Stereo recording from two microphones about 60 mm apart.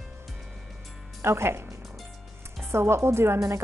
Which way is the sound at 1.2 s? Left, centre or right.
Right.